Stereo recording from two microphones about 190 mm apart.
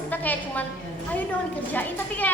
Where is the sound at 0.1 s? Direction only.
10° left (ahead or behind).